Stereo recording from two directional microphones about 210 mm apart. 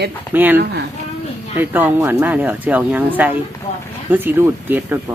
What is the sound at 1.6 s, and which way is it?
Speech, 10° right (ahead or behind).